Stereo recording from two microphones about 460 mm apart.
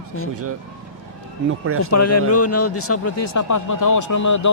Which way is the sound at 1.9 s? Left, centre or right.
Left.